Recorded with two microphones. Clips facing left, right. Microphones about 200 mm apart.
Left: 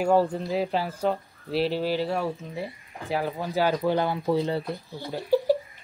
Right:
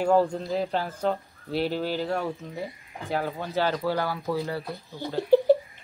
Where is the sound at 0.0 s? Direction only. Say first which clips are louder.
Even; 5° left (ahead or behind).